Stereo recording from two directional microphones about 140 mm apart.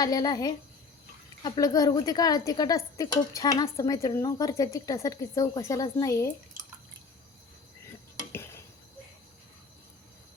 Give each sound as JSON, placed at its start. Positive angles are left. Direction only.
{"t": 0.0, "sound": "a woman's voice", "side_deg": 25}